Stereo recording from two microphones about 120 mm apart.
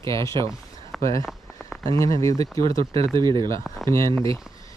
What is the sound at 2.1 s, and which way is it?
Speech, 25° left (ahead or behind).